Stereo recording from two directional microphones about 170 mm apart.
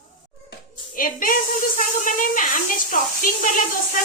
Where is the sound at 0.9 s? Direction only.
55° left (ahead or behind).